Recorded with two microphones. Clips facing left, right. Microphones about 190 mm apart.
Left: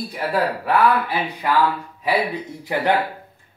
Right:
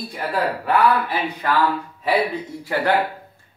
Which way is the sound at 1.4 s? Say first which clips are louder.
Left 1 dB; 10° left (ahead or behind).